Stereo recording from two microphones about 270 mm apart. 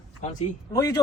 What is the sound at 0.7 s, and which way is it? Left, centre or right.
Speech, centre.